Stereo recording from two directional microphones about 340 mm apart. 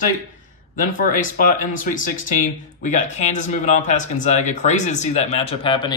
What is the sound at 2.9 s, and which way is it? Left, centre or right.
Speech, centre.